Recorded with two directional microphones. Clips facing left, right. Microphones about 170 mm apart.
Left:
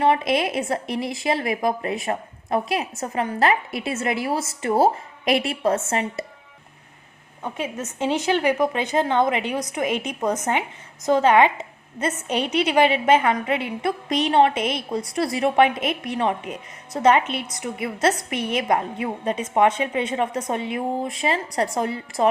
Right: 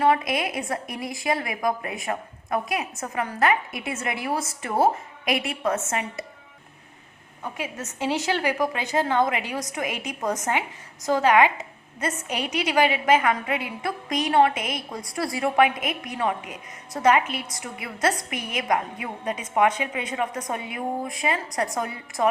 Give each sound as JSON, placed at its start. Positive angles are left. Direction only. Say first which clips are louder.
{"t": 0.0, "sound": "a woman's voice", "louder": "left 2 dB", "side_deg": 25}
{"t": 7.4, "sound": "a woman's voice", "louder": "left 4 dB", "side_deg": 25}